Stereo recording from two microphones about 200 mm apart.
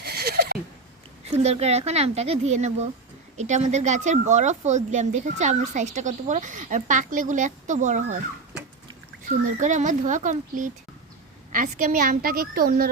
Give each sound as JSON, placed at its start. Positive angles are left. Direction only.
{"t": 0.0, "sound": "a sound", "side_deg": -55}
{"t": 1.2, "sound": "speech", "side_deg": -30}
{"t": 9.4, "sound": "a woman's voice", "side_deg": -40}